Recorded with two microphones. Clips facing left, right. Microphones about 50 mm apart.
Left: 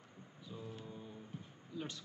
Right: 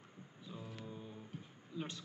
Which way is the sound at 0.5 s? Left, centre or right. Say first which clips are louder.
Left 1 dB; centre.